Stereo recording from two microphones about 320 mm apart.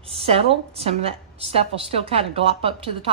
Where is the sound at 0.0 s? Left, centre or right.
Centre.